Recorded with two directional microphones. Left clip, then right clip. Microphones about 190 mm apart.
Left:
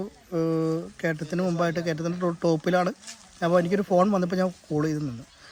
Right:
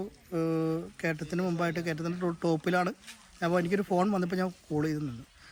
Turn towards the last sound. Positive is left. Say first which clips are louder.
# left 4 dB
turn(degrees=15)  # may be behind; listen again after turning